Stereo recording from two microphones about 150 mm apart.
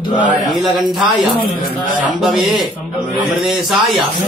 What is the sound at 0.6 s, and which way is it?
Mantra, centre (ahead or behind).